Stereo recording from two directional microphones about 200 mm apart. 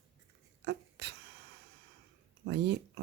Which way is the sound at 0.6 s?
55° right (ahead or behind).